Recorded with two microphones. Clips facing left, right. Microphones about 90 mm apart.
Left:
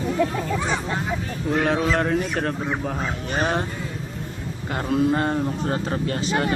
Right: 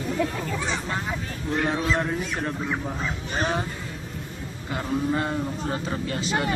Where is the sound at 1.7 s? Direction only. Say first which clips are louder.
Left 5 dB; 75° left (ahead or behind).